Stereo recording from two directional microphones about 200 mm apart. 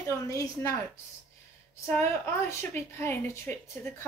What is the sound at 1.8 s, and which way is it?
A woman's voice, 10° left (ahead or behind).